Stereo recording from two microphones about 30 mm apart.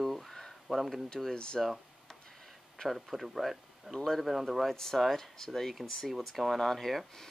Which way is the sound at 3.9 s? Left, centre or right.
Centre.